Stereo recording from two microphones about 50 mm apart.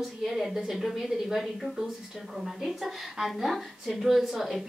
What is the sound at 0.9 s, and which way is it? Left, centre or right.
A woman's voice, centre.